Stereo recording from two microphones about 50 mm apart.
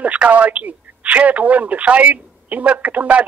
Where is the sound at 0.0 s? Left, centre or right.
Right.